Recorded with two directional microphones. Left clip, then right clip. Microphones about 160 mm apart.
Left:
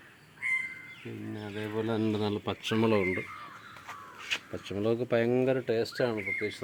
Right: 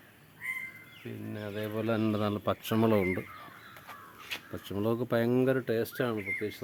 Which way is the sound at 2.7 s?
45° right (ahead or behind).